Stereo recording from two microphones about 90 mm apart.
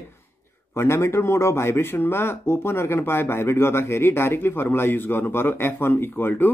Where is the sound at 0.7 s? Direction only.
30° left (ahead or behind).